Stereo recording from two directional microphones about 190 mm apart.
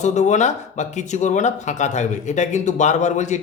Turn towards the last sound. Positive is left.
turn(degrees=40)  # may be behind; listen again after turning